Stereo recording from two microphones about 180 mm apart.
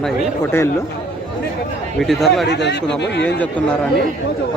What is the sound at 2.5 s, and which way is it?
Speech, 70° left (ahead or behind).